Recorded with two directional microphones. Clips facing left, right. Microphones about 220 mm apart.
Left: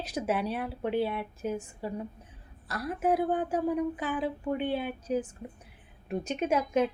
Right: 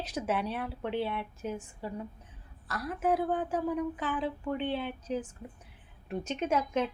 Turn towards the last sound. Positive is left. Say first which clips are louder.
# left 3 dB
turn(degrees=10)  # may be behind; listen again after turning